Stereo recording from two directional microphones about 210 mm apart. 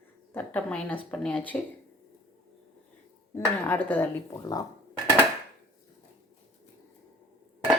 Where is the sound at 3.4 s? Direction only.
10° left (ahead or behind).